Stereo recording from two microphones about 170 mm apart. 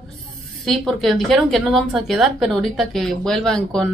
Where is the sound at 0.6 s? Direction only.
Centre (ahead or behind).